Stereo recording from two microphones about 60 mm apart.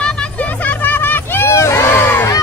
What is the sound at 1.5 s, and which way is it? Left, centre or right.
Crowd, left.